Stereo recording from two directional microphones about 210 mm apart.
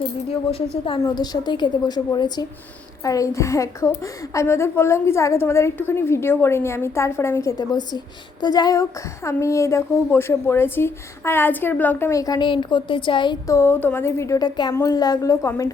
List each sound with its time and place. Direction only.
0.5 s a woman's voice: 20° left (ahead or behind)